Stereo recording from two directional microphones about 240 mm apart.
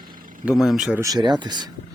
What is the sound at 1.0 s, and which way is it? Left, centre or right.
Speech, centre.